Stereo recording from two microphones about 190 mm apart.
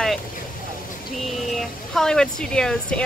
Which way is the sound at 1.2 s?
Centre (ahead or behind).